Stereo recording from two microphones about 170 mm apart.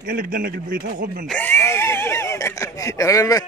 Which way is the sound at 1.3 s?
10° left (ahead or behind).